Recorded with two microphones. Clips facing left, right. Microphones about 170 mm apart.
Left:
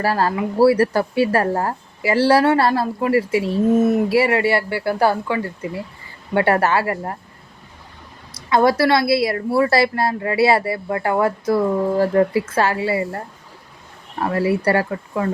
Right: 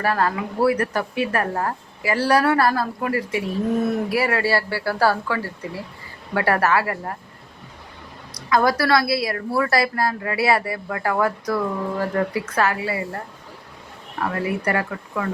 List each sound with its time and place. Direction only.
0.0 s speech: 30° left (ahead or behind)
8.3 s speech: 25° left (ahead or behind)
14.2 s speech: 30° left (ahead or behind)